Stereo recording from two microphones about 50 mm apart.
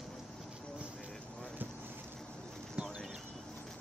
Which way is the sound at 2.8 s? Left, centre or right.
Right.